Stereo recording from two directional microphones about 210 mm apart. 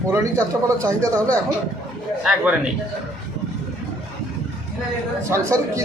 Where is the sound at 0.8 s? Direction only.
15° right (ahead or behind).